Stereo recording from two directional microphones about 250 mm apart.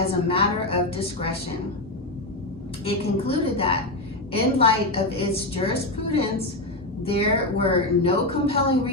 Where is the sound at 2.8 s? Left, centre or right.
Left.